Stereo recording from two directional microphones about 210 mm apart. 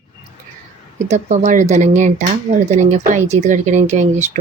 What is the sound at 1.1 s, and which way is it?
Speech, 35° right (ahead or behind).